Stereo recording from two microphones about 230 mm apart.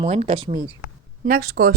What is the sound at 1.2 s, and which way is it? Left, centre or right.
Speech, right.